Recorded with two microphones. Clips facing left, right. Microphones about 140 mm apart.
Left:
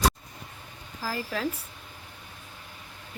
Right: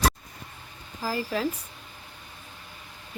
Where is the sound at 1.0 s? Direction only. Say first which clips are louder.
Right 3 dB; 10° right (ahead or behind).